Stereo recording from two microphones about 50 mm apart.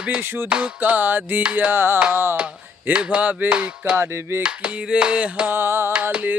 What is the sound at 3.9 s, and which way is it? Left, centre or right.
Music, right.